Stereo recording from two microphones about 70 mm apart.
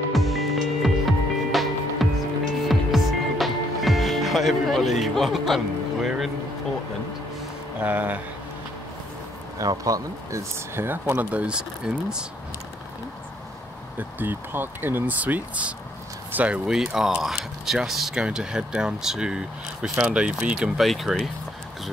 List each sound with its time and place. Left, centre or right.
0.1 s music: centre
7.8 s speech: right
9.8 s speech: right
10.8 s speech: right
11.3 s speech: centre
13.9 s speech: right
16.7 s speech: centre
20.8 s speech: centre